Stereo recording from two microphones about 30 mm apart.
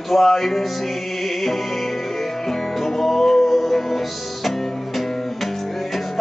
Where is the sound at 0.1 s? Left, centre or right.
Centre.